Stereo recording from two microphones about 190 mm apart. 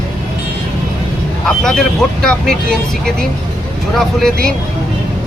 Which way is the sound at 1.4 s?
Centre (ahead or behind).